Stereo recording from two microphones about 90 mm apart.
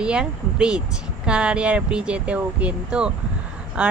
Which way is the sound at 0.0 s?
10° right (ahead or behind).